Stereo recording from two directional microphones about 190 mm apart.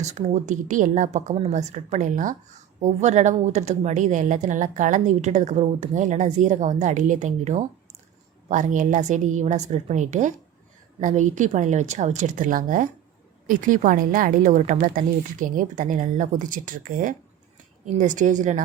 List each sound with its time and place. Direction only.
0.0 s speech: 35° right (ahead or behind)